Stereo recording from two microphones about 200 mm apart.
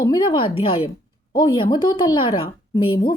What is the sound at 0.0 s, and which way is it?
Speech, 20° left (ahead or behind).